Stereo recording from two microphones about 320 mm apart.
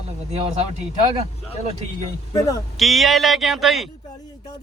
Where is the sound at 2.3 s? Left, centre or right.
Centre.